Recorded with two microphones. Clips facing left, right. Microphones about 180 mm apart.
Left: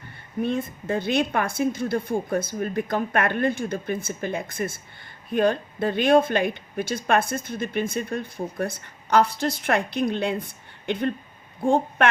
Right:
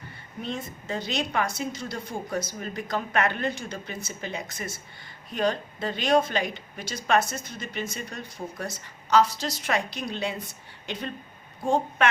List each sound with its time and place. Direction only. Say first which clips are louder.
0.4 s a woman's voice: left 7 dB; 55° left (ahead or behind)